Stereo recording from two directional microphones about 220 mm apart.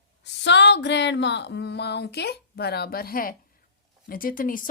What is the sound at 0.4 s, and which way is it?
Speech, 50° left (ahead or behind).